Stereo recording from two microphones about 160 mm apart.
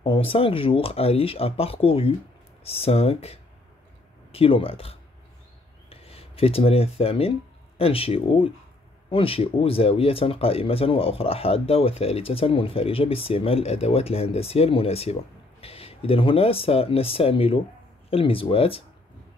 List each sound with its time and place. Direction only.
0.0 s speech: 35° left (ahead or behind)